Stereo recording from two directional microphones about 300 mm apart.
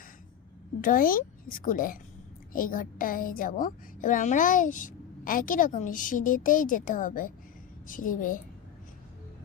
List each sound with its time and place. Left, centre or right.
0.8 s a woman's voice: left